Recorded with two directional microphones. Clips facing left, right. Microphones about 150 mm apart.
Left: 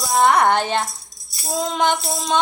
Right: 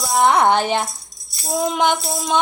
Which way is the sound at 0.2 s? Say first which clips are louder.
Right 1 dB; 15° right (ahead or behind).